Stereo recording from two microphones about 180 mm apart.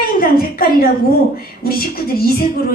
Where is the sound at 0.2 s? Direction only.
55° left (ahead or behind).